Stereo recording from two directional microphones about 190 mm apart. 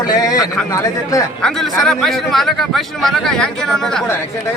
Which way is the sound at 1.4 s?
5° left (ahead or behind).